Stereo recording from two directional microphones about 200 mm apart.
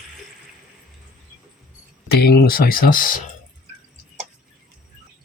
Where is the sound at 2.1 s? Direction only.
50° left (ahead or behind).